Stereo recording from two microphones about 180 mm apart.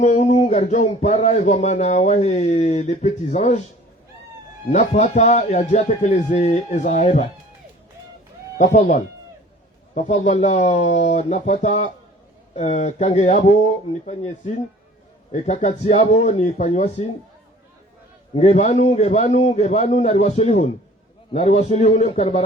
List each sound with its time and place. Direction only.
0.0 s speech: 40° left (ahead or behind)
4.7 s speech: 40° left (ahead or behind)
8.5 s speech: 45° left (ahead or behind)
18.3 s speech: 40° left (ahead or behind)